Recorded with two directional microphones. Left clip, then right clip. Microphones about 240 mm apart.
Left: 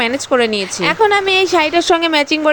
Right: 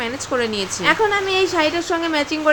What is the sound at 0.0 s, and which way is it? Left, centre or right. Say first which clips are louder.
A woman's voice: left 7 dB; left.